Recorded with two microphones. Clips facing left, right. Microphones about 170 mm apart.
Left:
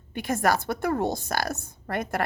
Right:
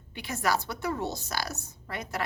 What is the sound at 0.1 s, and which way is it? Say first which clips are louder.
A woman's voice: left 5 dB; 50° left (ahead or behind).